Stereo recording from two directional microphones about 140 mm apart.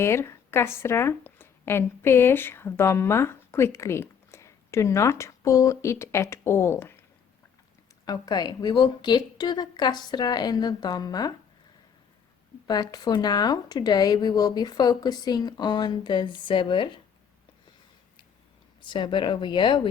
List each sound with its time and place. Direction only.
0.0 s a woman's voice: 20° left (ahead or behind)
8.0 s a woman's voice: 25° left (ahead or behind)
12.6 s speech: 30° left (ahead or behind)
18.8 s a woman's voice: 35° left (ahead or behind)